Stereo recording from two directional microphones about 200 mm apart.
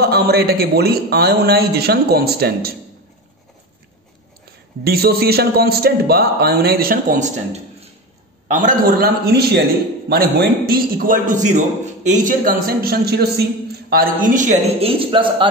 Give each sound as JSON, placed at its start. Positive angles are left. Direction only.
{"t": 0.0, "sound": "a man's voice", "side_deg": -55}
{"t": 4.8, "sound": "a man's voice", "side_deg": -50}